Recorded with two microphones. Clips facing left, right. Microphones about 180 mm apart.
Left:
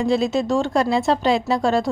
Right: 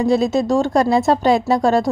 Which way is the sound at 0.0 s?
40° right (ahead or behind).